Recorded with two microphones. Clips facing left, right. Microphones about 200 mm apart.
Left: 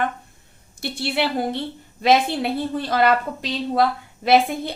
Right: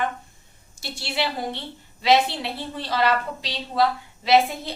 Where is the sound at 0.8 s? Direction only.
55° left (ahead or behind).